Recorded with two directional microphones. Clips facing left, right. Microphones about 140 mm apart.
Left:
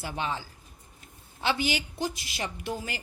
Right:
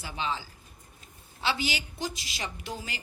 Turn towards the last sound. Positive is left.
turn(degrees=50)  # may be behind; listen again after turning